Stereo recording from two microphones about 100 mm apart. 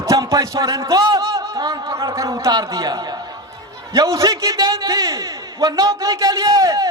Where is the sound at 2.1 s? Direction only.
30° right (ahead or behind).